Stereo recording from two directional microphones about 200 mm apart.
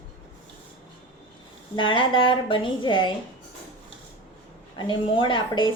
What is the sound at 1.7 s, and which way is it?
Speech, 25° left (ahead or behind).